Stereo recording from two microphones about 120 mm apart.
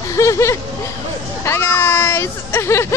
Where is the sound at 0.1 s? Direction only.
25° left (ahead or behind).